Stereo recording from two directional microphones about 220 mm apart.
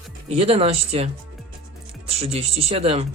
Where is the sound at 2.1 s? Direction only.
25° right (ahead or behind).